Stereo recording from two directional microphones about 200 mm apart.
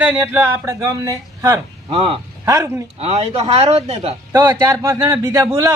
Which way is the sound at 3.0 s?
30° right (ahead or behind).